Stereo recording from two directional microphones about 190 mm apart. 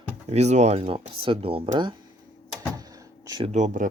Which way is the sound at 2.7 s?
20° right (ahead or behind).